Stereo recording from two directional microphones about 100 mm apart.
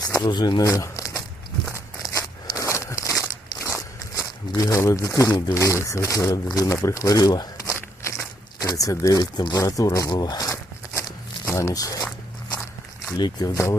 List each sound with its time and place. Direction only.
0.0 s speech: 40° left (ahead or behind)
0.7 s crumpling: 30° left (ahead or behind)
1.7 s crunch: 35° left (ahead or behind)
3.8 s speech: 35° left (ahead or behind)
8.0 s crumpling: 30° left (ahead or behind)
9.4 s speech: 40° left (ahead or behind)
13.1 s speech: 45° left (ahead or behind)